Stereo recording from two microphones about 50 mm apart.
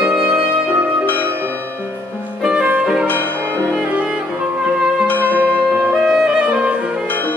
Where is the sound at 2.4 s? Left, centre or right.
Centre.